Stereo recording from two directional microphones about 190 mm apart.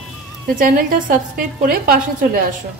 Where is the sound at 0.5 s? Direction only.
45° right (ahead or behind).